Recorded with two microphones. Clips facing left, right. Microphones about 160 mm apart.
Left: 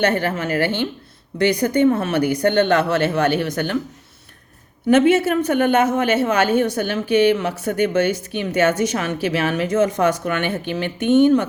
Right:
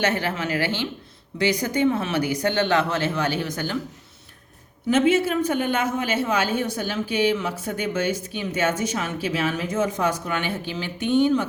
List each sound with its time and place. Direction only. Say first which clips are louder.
0.0 s a woman's voice: left 5 dB; 55° left (ahead or behind)
4.9 s a woman's voice: left 5 dB; 65° left (ahead or behind)